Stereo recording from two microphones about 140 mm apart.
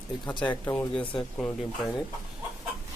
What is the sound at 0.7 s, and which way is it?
Speech, 10° left (ahead or behind).